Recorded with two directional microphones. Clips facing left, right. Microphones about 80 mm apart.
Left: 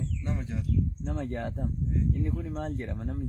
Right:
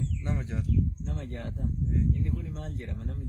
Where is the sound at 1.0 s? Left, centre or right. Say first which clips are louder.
Left 5 dB; left.